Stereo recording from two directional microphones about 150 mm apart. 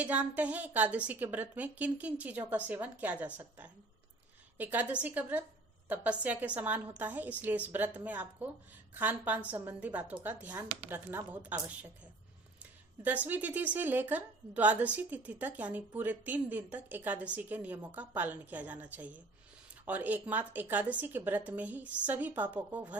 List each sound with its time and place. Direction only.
0.0 s a woman's voice: 10° right (ahead or behind)
13.2 s a woman's voice: 10° right (ahead or behind)